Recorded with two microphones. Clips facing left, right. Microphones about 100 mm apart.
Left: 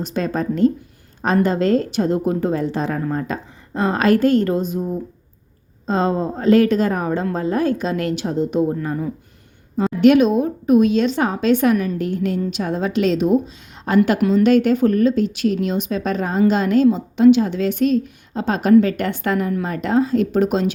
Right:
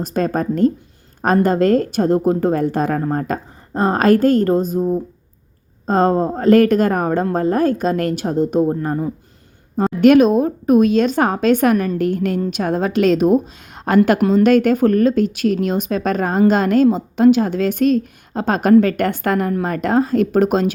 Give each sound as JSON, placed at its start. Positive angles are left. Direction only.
{"t": 0.0, "sound": "speech", "side_deg": -45}
{"t": 5.8, "sound": "speech", "side_deg": -50}